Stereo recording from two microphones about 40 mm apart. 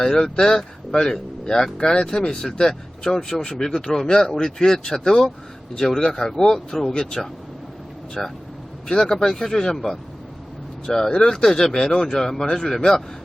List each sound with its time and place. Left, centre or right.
0.0 s speech: centre
12.5 s a man's voice: centre